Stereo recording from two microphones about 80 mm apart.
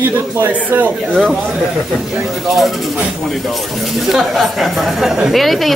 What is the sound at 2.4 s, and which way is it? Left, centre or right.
Speech, centre.